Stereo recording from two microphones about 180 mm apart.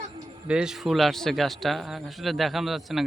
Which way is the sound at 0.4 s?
5° right (ahead or behind).